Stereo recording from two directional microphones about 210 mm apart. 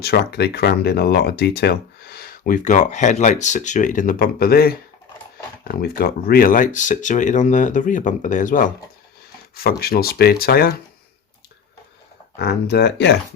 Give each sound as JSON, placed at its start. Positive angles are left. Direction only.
{"t": 0.0, "sound": "speech", "side_deg": 50}
{"t": 12.4, "sound": "speech", "side_deg": 50}